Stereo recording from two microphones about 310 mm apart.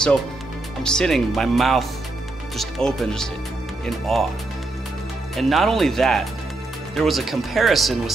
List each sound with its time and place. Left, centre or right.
0.8 s speech: centre
5.3 s speech: centre